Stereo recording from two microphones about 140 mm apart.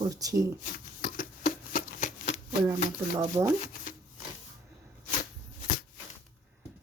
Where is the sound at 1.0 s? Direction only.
85° left; by 2.4 s 60° left (ahead or behind).